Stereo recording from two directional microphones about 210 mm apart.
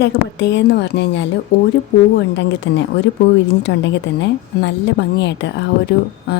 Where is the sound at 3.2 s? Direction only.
30° left (ahead or behind).